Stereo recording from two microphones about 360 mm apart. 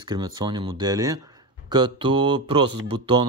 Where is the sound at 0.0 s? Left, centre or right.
Centre.